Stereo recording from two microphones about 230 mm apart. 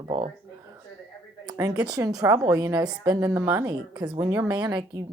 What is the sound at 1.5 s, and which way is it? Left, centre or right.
A woman's voice, centre.